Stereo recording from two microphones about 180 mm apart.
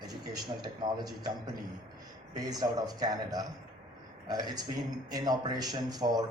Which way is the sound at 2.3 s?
20° right (ahead or behind).